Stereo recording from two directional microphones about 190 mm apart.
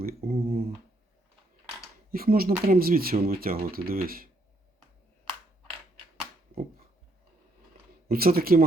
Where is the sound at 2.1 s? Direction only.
50° right (ahead or behind).